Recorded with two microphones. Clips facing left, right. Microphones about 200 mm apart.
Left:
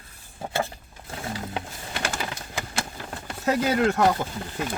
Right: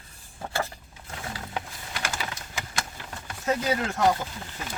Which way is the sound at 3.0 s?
60° left (ahead or behind).